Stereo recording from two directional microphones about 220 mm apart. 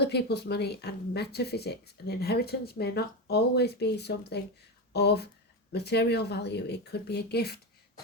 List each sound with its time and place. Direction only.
0.0 s a woman's voice: 50° left (ahead or behind)